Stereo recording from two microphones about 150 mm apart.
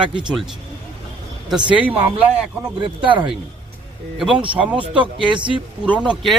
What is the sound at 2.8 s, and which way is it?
Speech, 35° right (ahead or behind).